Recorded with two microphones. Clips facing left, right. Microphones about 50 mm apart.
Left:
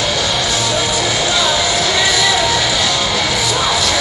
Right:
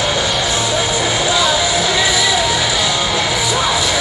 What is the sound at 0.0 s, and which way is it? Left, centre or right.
Music, centre.